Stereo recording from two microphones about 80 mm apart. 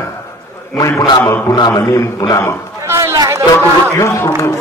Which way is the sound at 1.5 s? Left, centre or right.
Left.